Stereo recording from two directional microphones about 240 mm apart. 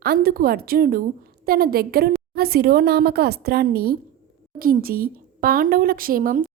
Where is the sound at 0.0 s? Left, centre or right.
Right.